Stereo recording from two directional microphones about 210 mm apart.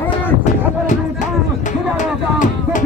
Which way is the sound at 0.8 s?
35° left (ahead or behind).